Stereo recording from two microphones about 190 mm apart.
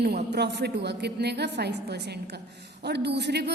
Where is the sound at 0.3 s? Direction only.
65° right (ahead or behind).